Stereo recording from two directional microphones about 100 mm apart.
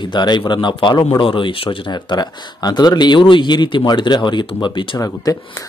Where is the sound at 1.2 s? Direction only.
60° left (ahead or behind).